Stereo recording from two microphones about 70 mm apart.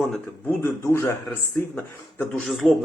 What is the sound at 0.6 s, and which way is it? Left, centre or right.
Speech, left.